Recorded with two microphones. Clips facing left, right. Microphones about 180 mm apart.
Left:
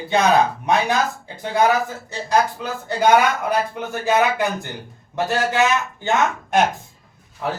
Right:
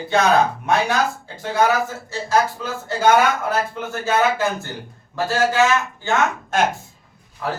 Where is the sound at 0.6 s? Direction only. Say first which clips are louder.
Even; 15° left (ahead or behind).